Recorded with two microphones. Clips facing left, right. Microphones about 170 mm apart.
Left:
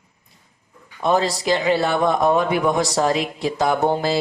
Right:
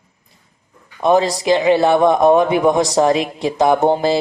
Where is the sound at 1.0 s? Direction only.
15° right (ahead or behind).